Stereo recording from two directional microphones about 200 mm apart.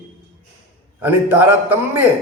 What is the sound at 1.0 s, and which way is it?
Speech, 10° right (ahead or behind).